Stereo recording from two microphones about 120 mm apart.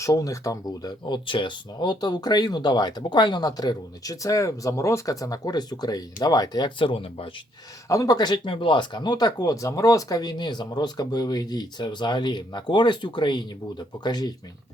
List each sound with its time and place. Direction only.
0.0 s speech: 30° left (ahead or behind); by 7.3 s 50° left (ahead or behind)
7.9 s speech: 30° left (ahead or behind)